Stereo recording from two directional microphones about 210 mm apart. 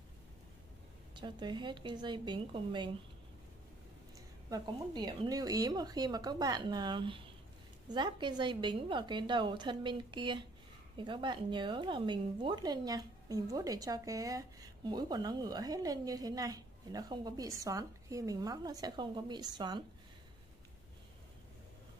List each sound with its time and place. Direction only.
1.1 s a woman's voice: 20° right (ahead or behind)
4.5 s a woman's voice: 20° right (ahead or behind)